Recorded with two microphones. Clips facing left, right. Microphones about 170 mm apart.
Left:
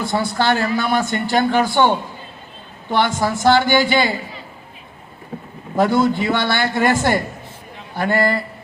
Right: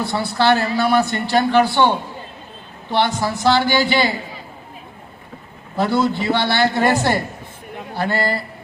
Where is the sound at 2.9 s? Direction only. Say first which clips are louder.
Left 1 dB; 50° left (ahead or behind).